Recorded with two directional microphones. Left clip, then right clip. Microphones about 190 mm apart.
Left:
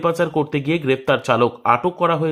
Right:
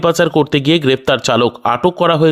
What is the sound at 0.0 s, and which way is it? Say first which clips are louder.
Speech: right 6 dB; 35° right (ahead or behind).